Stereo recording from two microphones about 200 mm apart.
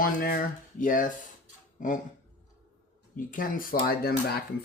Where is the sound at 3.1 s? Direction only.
45° left (ahead or behind).